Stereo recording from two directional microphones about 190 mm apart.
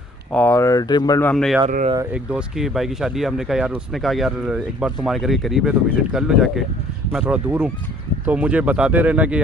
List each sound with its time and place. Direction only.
0.3 s speech: 10° left (ahead or behind)
1.2 s speech: centre (ahead or behind)